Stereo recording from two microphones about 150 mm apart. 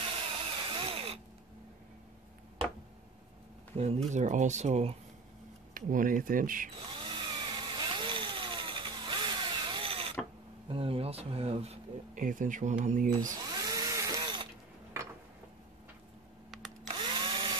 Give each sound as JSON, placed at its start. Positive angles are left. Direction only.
{"t": 0.7, "sound": "a sound", "side_deg": -35}
{"t": 3.7, "sound": "speech", "side_deg": -40}
{"t": 4.1, "sound": "speech", "side_deg": -55}
{"t": 5.8, "sound": "speech", "side_deg": -65}
{"t": 6.9, "sound": "chainsaw", "side_deg": -30}
{"t": 10.7, "sound": "speech", "side_deg": -40}
{"t": 12.2, "sound": "speech", "side_deg": -60}
{"t": 13.2, "sound": "drill", "side_deg": -20}
{"t": 16.4, "sound": "a sound", "side_deg": 0}
{"t": 16.8, "sound": "drill", "side_deg": -35}